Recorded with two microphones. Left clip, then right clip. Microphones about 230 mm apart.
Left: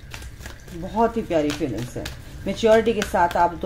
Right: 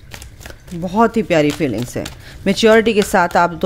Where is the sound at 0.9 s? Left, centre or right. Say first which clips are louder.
Right 7 dB; right.